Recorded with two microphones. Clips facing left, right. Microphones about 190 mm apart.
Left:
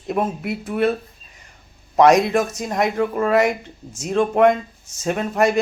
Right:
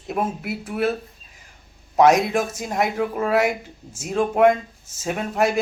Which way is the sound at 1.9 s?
5° right (ahead or behind).